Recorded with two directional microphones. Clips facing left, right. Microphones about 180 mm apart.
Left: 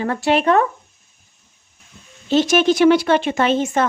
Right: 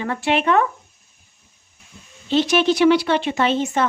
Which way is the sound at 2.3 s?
45° left (ahead or behind).